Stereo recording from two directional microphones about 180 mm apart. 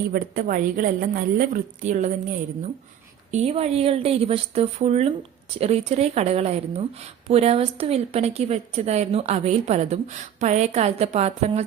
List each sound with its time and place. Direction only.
0.1 s a woman's voice: 55° right (ahead or behind)
3.3 s a woman's voice: 35° right (ahead or behind)